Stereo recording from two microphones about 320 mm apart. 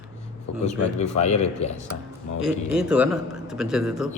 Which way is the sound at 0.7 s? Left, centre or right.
Left.